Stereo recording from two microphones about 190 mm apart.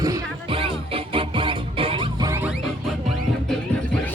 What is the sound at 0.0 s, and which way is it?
Music, 25° right (ahead or behind).